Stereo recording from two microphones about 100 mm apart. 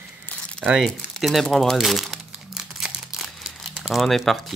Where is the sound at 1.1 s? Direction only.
Centre (ahead or behind).